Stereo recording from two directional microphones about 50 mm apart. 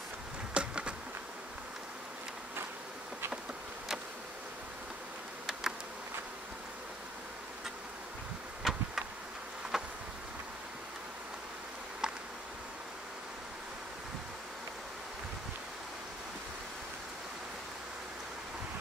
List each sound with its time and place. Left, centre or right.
0.6 s bee: centre
5.5 s insect: centre
8.6 s bee: centre
9.7 s insect: centre
12.0 s insect: centre